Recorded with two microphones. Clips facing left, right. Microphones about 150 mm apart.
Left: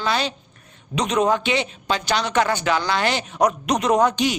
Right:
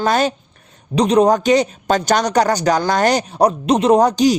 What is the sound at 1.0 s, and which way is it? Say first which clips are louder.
Speech: right 7 dB; 35° right (ahead or behind).